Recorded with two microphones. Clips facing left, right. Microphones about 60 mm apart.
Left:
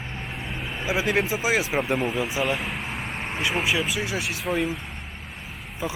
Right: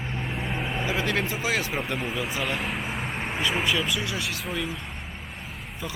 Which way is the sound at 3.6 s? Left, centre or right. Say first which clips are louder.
Left 1 dB; centre.